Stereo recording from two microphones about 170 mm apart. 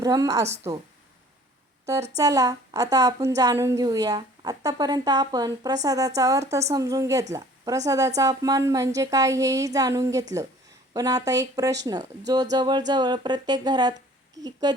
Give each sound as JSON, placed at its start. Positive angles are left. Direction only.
{"t": 0.0, "sound": "a woman's voice", "side_deg": -20}
{"t": 2.1, "sound": "a woman's voice", "side_deg": -20}
{"t": 7.3, "sound": "a sound", "side_deg": -20}
{"t": 7.9, "sound": "a woman's voice", "side_deg": -20}